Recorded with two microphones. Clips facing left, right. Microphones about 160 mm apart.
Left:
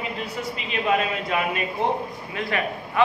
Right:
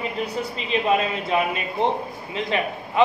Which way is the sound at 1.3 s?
25° right (ahead or behind).